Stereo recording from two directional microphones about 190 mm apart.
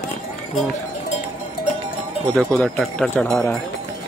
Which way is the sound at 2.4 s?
Centre (ahead or behind).